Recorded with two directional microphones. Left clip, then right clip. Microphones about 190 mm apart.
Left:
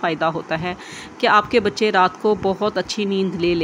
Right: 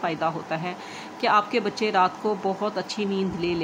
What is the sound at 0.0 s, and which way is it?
Speech, 20° left (ahead or behind).